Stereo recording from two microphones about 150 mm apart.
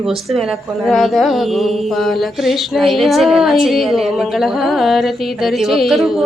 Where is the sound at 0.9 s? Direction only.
Centre (ahead or behind).